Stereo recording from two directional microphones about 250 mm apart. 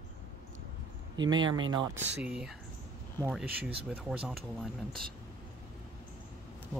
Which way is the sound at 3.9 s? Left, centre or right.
Centre.